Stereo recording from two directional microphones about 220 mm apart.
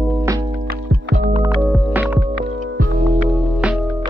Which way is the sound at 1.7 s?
5° right (ahead or behind).